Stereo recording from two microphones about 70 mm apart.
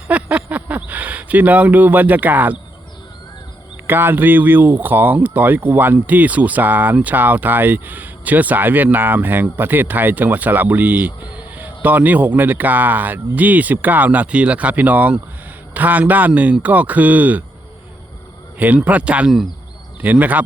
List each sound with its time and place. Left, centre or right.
0.1 s a sound: centre
0.5 s speech: right
3.8 s speech: right
18.6 s speech: right